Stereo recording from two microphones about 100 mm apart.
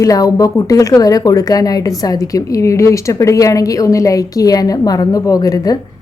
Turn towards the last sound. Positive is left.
turn(degrees=35)  # may be behind; listen again after turning